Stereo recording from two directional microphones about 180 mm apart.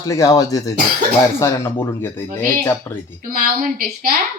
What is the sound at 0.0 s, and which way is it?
Speech, 20° left (ahead or behind).